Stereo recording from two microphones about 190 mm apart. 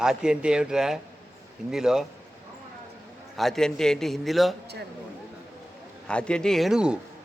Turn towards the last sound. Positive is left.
turn(degrees=-5)  # may be behind; listen again after turning